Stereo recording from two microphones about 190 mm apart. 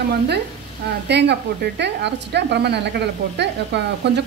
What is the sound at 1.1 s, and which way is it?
A woman's voice, 65° right (ahead or behind).